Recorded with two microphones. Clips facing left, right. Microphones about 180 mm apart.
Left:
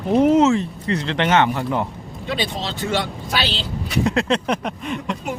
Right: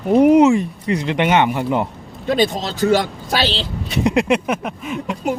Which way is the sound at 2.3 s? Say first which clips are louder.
Right 7 dB; 45° right (ahead or behind).